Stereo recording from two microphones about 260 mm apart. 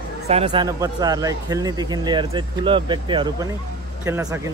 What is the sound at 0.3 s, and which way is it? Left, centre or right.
Speech, right.